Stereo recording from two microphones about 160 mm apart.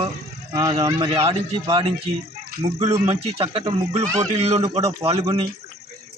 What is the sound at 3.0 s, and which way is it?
Speech, 40° right (ahead or behind).